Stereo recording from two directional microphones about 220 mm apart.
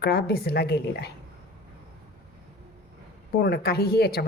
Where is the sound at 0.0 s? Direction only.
45° left (ahead or behind).